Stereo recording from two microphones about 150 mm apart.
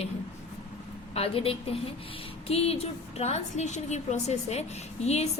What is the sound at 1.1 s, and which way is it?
A woman's voice, 40° left (ahead or behind).